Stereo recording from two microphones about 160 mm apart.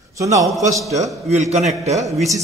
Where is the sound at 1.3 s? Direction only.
45° right (ahead or behind).